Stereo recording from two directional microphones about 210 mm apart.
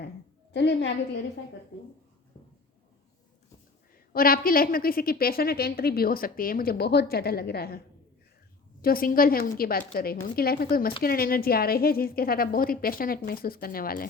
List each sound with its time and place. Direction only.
0.5 s a woman's voice: 55° left (ahead or behind)
4.1 s a woman's voice: 45° left (ahead or behind)
8.8 s a woman's voice: 45° left (ahead or behind)